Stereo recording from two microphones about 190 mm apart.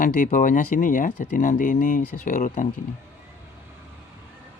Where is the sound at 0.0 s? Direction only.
40° left (ahead or behind).